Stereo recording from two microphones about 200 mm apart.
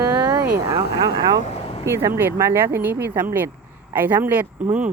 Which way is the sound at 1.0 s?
20° right (ahead or behind).